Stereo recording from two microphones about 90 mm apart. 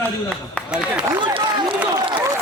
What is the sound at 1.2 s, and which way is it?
Speech, 65° right (ahead or behind).